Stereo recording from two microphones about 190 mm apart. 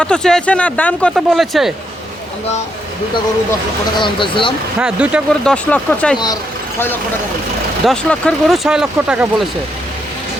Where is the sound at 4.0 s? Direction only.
25° left (ahead or behind).